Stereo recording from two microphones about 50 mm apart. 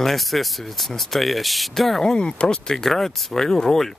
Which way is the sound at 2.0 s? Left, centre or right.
Centre.